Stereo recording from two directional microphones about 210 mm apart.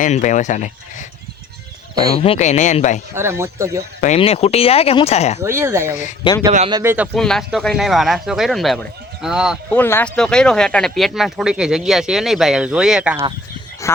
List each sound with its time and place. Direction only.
0.0 s speech: 35° left (ahead or behind)
2.1 s speech: 25° left (ahead or behind)
3.2 s speech: 10° right (ahead or behind)
4.0 s speech: 30° left (ahead or behind)
5.4 s speech: 10° right (ahead or behind)
6.9 s speech: centre (ahead or behind)
9.7 s speech: 10° left (ahead or behind)
13.8 s speech: 15° left (ahead or behind)